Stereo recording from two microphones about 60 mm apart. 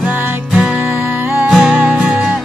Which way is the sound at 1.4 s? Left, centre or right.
Centre.